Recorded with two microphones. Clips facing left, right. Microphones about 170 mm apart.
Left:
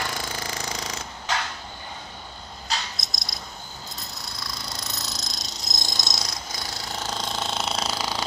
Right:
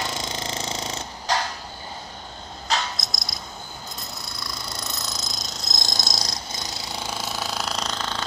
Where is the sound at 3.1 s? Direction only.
Centre (ahead or behind).